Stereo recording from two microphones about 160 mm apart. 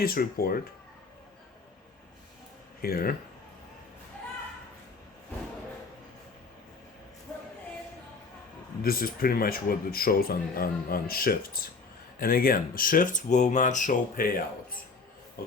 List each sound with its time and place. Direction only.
0.0 s speech: 65° left (ahead or behind)
2.8 s speech: 70° left (ahead or behind)
8.8 s speech: 65° left (ahead or behind)